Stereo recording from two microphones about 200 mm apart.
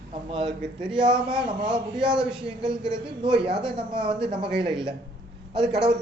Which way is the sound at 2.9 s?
25° right (ahead or behind).